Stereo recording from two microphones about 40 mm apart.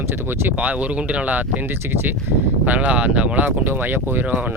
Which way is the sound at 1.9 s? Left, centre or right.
Right.